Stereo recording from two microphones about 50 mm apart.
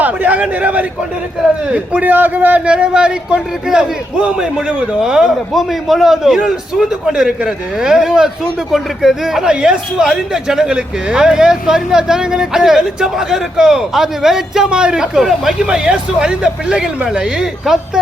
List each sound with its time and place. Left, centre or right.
0.0 s a sound: right
0.6 s a man's voice: right
2.6 s speech: right